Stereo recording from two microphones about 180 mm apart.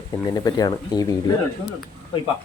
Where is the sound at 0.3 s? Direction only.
20° left (ahead or behind).